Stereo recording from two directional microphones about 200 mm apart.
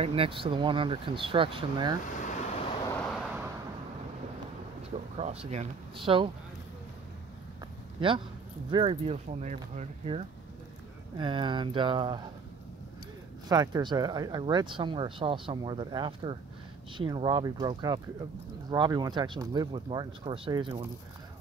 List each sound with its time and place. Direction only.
0.0 s speech: 25° right (ahead or behind)
3.0 s vehicle: centre (ahead or behind)
4.9 s speech: 30° right (ahead or behind)
8.0 s speech: 25° right (ahead or behind)
13.5 s speech: 20° right (ahead or behind)